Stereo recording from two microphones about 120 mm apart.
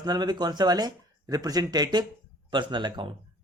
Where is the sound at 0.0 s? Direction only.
35° right (ahead or behind).